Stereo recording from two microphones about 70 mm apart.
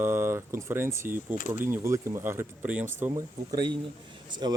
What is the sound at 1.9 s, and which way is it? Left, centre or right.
Speech, right.